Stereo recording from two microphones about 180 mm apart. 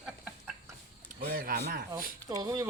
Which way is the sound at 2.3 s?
20° right (ahead or behind).